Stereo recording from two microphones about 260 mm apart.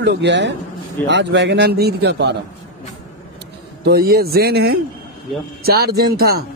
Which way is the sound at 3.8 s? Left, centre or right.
Right.